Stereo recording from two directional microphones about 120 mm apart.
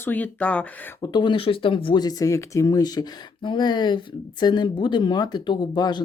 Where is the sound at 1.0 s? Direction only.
40° left (ahead or behind).